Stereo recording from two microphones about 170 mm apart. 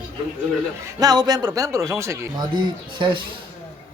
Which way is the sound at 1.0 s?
25° right (ahead or behind).